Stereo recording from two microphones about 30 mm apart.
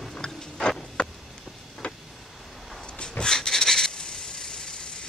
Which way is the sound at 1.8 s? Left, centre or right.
Left.